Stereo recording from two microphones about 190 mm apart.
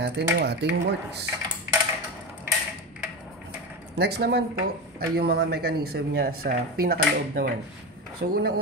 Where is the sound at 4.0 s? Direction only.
60° right (ahead or behind).